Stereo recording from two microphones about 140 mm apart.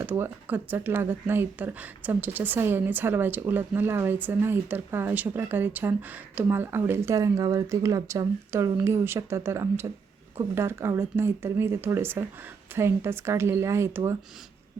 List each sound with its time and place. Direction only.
0.0 s speech: 15° right (ahead or behind)